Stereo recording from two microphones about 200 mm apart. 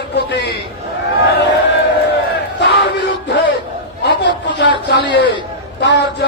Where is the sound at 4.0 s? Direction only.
60° left (ahead or behind).